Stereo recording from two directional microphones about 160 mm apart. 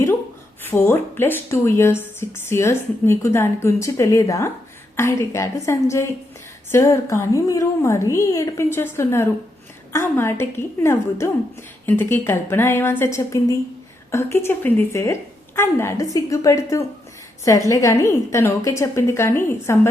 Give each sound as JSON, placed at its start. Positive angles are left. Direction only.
{"t": 0.6, "sound": "a woman's voice", "side_deg": 15}